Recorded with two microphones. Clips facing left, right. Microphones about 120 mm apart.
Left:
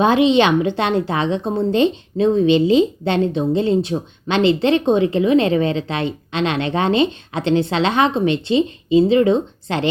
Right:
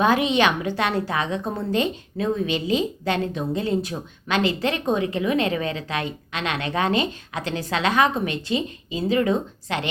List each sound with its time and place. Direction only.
0.0 s a woman's voice: 25° left (ahead or behind)